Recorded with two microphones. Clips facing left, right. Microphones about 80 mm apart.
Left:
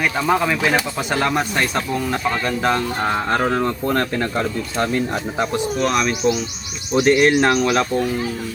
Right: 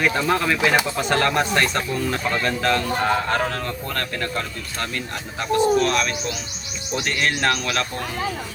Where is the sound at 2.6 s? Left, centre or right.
Left.